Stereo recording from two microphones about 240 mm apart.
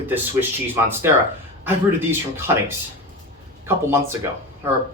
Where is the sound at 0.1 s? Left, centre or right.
Centre.